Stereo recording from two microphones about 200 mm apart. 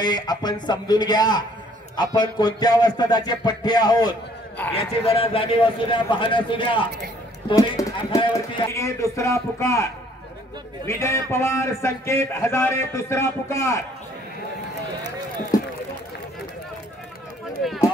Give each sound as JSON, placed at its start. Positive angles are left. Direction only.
{"t": 0.0, "sound": "music", "side_deg": 20}
{"t": 7.4, "sound": "speech", "side_deg": 20}
{"t": 10.9, "sound": "speech", "side_deg": 15}
{"t": 15.5, "sound": "run", "side_deg": 20}